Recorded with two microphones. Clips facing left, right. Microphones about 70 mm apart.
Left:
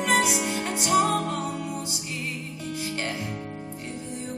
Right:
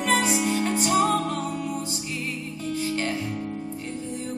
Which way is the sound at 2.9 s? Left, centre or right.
Left.